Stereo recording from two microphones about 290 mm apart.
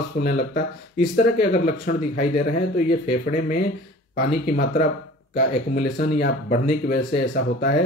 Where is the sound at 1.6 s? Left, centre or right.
Left.